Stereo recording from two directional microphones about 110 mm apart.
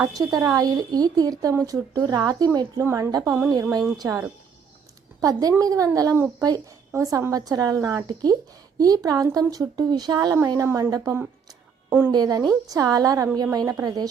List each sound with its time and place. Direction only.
0.0 s a woman's voice: 30° right (ahead or behind)
3.2 s a woman's voice: 20° right (ahead or behind)
3.6 s a woman's voice: 30° right (ahead or behind)
5.2 s a woman's voice: 35° right (ahead or behind)
11.9 s a woman's voice: 20° right (ahead or behind)
12.1 s a woman's voice: 35° right (ahead or behind)